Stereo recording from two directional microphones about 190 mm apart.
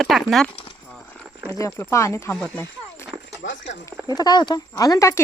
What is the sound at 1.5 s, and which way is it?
Speech, 15° left (ahead or behind).